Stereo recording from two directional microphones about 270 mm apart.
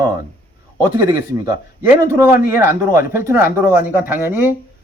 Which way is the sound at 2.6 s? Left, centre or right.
Centre.